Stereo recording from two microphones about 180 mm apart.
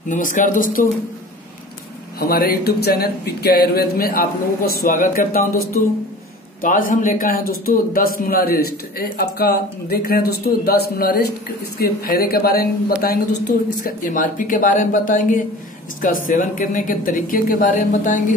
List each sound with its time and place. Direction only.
0.1 s speech: 45° left (ahead or behind)
2.1 s a man's voice: 55° left (ahead or behind)